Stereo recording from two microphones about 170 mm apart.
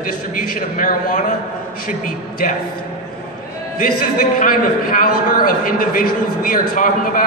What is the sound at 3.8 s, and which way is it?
A man's voice, 50° left (ahead or behind).